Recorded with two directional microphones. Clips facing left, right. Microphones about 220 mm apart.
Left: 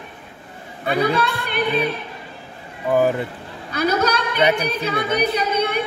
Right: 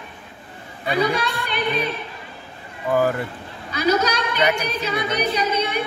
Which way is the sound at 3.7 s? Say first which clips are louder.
Even; 55° left (ahead or behind).